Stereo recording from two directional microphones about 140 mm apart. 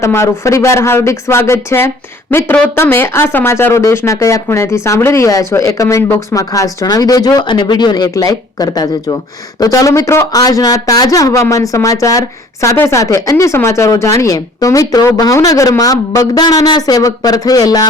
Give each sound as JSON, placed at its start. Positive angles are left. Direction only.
{"t": 0.0, "sound": "speech", "side_deg": 20}